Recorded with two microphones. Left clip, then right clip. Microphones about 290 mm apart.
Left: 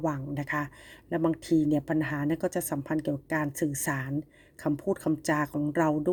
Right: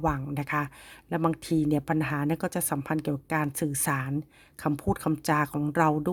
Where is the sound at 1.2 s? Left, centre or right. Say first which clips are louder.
Left 1 dB; right.